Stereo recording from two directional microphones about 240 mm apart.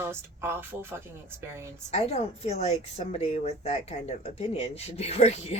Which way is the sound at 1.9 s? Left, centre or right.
Left.